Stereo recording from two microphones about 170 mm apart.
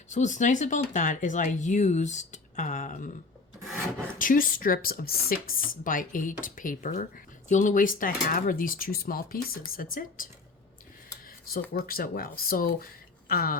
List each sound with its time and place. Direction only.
0.1 s speech: 45° left (ahead or behind)
4.2 s speech: 55° left (ahead or behind)
11.7 s speech: 60° left (ahead or behind)